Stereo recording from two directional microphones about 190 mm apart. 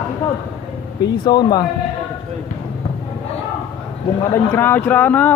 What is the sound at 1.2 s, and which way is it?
Speech, 20° left (ahead or behind).